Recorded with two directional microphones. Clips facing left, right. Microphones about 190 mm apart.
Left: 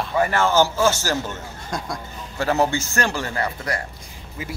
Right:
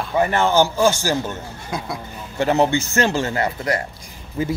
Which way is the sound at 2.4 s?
20° right (ahead or behind).